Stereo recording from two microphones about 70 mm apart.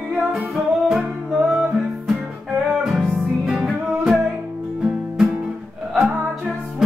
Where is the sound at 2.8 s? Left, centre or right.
Centre.